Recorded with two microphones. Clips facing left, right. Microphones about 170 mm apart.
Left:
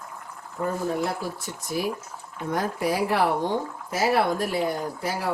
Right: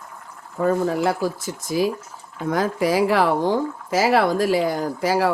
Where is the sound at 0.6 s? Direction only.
90° right.